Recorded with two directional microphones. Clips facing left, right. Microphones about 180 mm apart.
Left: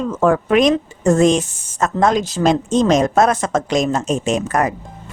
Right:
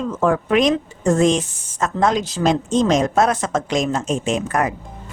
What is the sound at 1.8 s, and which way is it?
A woman's voice, 45° left (ahead or behind).